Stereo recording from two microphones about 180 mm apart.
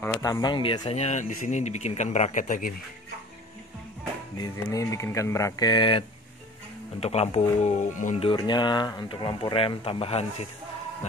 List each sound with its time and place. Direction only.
0.2 s speech: 20° left (ahead or behind); by 2.7 s 45° left (ahead or behind)
4.6 s speech: 20° left (ahead or behind); by 8.3 s 40° left (ahead or behind)
8.3 s speech: 25° left (ahead or behind)